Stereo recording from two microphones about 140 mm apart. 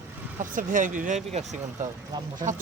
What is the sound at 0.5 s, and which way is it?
Speech, 70° right (ahead or behind).